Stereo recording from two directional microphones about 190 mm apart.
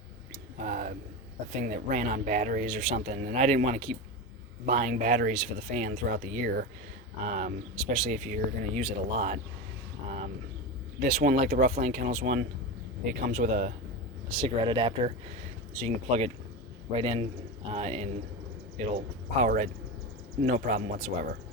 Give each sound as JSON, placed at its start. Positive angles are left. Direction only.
{"t": 0.6, "sound": "speech", "side_deg": -45}
{"t": 11.0, "sound": "speech", "side_deg": -50}
{"t": 14.3, "sound": "speech", "side_deg": -25}